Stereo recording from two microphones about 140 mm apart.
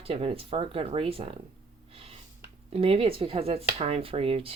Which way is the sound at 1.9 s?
45° right (ahead or behind).